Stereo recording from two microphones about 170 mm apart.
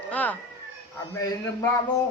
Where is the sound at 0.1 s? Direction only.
10° left (ahead or behind).